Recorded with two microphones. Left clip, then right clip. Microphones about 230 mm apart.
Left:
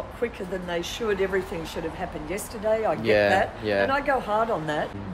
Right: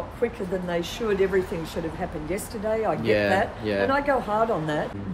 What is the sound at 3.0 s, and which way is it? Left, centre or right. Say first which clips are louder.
Speech: left 2 dB; centre.